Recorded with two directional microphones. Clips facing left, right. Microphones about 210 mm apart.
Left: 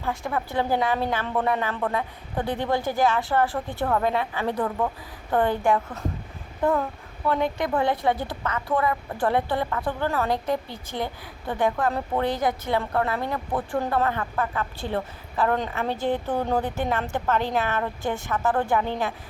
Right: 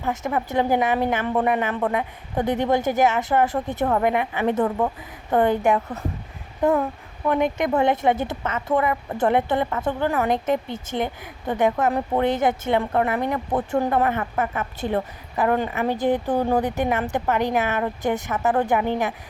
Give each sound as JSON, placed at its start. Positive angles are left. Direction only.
{"t": 0.0, "sound": "a woman's voice", "side_deg": -20}
{"t": 7.3, "sound": "a woman's voice", "side_deg": -15}